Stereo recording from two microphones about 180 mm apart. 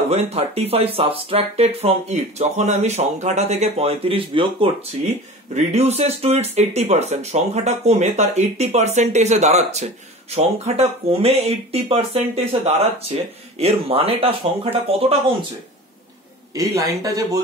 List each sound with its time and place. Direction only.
0.1 s speech: 35° right (ahead or behind)
16.5 s speech: 20° right (ahead or behind)